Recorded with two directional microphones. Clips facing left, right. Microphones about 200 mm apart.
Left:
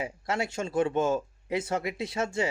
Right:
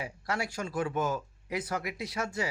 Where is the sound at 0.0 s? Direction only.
25° left (ahead or behind).